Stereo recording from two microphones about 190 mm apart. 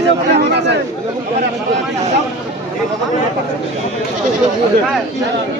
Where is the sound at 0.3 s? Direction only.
65° right (ahead or behind).